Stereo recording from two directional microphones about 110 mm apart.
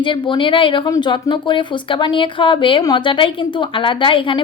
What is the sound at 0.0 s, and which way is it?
A woman's voice, 50° left (ahead or behind).